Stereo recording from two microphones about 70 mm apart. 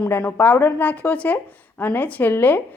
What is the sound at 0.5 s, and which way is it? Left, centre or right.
Speech, left.